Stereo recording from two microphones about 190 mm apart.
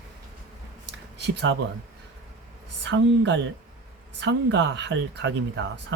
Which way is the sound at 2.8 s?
70° right (ahead or behind).